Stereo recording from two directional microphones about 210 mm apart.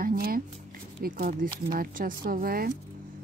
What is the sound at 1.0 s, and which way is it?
Speech, 45° right (ahead or behind).